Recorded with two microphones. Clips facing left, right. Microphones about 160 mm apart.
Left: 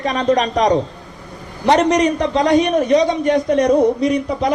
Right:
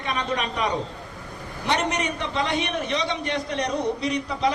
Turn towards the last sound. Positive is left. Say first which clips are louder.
# left 7 dB
turn(degrees=45)  # may be behind; listen again after turning